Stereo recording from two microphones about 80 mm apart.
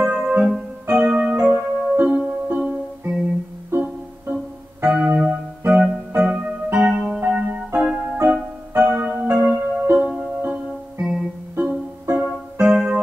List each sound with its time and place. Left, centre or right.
0.0 s music: centre
0.4 s keyboard: centre
2.0 s music: centre
3.7 s music: centre
4.8 s keyboard: centre
8.3 s music: centre
12.2 s keyboard: centre